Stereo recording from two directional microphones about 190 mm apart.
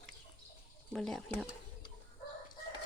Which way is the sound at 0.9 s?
5° left (ahead or behind).